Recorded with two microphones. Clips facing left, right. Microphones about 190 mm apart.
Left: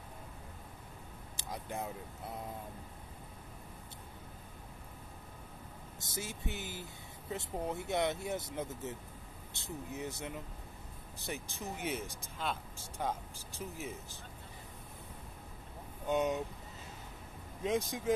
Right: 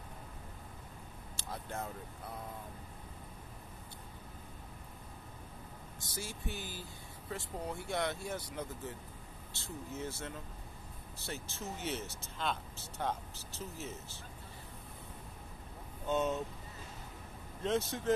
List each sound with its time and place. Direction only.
1.3 s speech: 15° left (ahead or behind)
5.9 s speech: 20° left (ahead or behind)
16.1 s speech: 15° left (ahead or behind)
17.6 s speech: 10° left (ahead or behind)